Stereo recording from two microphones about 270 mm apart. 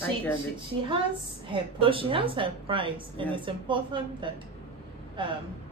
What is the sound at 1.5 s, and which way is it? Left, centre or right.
A woman's voice, centre.